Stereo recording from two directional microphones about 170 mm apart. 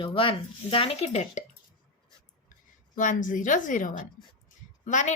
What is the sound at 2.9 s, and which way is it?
A woman's voice, 50° left (ahead or behind).